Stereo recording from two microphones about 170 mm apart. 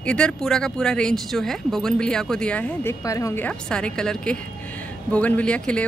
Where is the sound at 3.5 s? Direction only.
5° left (ahead or behind).